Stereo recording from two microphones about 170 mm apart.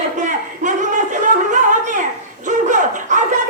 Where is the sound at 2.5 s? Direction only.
45° right (ahead or behind).